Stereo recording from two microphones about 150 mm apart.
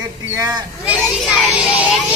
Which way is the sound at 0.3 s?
25° right (ahead or behind).